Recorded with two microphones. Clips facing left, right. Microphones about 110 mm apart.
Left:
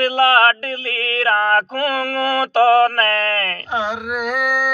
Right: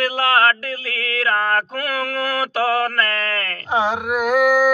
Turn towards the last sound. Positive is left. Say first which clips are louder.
# right 5 dB
turn(degrees=-25)  # may be behind; listen again after turning